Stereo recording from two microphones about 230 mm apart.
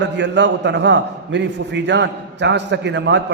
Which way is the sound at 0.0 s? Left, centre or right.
Right.